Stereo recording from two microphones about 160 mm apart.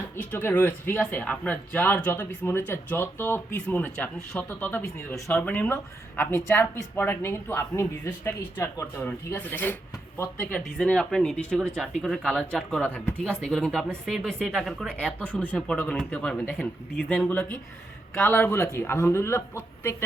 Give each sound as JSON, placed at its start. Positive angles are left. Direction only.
{"t": 0.2, "sound": "speech", "side_deg": 10}